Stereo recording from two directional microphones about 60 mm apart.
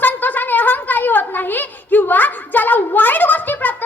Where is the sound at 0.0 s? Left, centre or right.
Left.